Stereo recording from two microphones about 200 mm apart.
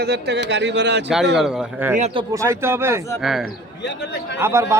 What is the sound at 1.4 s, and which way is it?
A man's voice, 5° right (ahead or behind).